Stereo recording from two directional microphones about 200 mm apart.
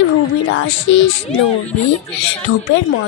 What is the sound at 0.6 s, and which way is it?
Speech, 70° left (ahead or behind).